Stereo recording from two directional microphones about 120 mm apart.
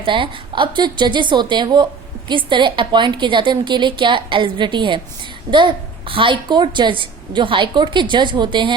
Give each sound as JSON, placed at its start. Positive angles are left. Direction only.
{"t": 0.0, "sound": "a woman's voice", "side_deg": -45}